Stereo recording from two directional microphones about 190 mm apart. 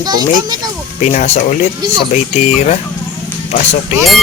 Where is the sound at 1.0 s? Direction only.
35° left (ahead or behind).